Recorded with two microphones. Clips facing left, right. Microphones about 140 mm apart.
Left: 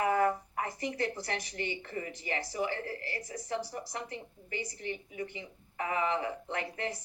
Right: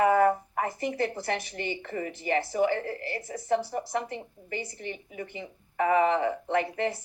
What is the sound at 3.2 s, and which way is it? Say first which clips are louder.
Speech: right 10 dB; 60° right (ahead or behind).